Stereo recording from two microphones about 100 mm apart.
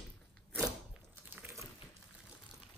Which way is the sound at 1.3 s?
25° right (ahead or behind).